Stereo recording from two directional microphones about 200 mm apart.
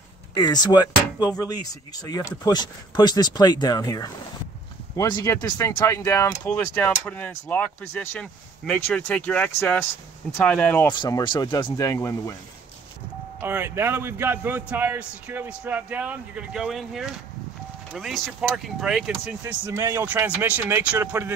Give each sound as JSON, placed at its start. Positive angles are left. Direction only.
{"t": 0.3, "sound": "speech", "side_deg": 20}
{"t": 10.9, "sound": "speech", "side_deg": 20}
{"t": 13.4, "sound": "a man's voice", "side_deg": -10}
{"t": 19.4, "sound": "a man's voice", "side_deg": -15}